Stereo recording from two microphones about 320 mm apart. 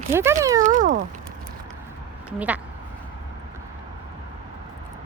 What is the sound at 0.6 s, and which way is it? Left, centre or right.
Speech, right.